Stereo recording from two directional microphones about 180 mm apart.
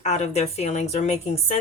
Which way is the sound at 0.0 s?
40° left (ahead or behind).